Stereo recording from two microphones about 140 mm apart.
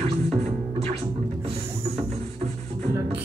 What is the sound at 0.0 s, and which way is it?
Music, 45° right (ahead or behind).